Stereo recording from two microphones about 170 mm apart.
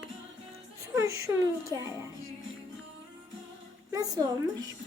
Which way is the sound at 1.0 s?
15° right (ahead or behind).